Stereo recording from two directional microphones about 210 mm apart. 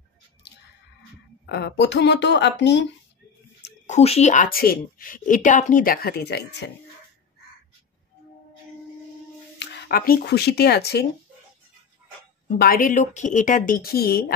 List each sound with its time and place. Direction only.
1.5 s a woman's voice: 55° left (ahead or behind)
3.8 s a woman's voice: 30° left (ahead or behind); by 6.6 s 50° left (ahead or behind)
9.6 s speech: 45° left (ahead or behind)
12.5 s a woman's voice: 45° left (ahead or behind)